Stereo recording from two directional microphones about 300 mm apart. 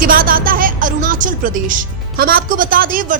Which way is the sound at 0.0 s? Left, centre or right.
Right.